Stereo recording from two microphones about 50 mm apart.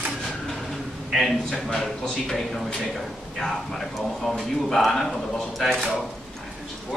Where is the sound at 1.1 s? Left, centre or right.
Centre.